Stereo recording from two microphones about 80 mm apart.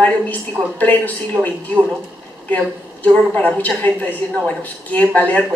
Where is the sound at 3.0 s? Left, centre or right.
Centre.